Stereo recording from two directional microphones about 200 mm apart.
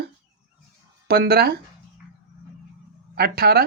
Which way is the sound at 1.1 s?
50° right (ahead or behind).